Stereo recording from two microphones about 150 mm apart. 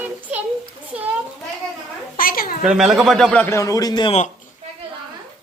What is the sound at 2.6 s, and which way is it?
Speech, 5° right (ahead or behind).